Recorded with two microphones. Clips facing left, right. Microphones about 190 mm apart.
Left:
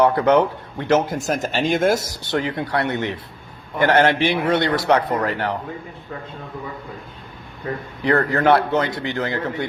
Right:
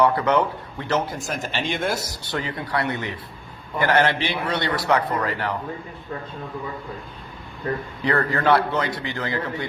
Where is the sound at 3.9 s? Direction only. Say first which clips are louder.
Left 4 dB; 20° left (ahead or behind).